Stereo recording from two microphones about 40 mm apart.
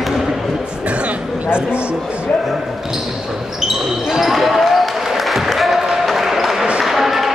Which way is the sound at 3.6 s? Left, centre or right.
Centre.